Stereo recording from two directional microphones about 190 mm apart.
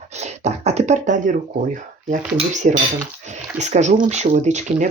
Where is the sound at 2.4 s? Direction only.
40° right (ahead or behind).